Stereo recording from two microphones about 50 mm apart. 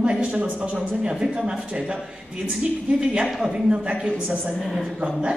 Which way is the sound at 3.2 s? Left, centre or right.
Centre.